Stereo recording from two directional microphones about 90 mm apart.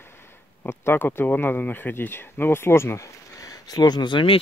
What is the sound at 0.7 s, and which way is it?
Speech, 25° left (ahead or behind).